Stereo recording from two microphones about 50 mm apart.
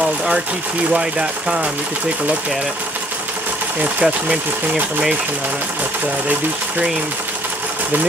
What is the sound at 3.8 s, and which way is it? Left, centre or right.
Speech, right.